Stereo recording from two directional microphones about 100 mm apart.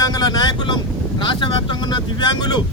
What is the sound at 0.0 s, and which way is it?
Speech, 40° left (ahead or behind).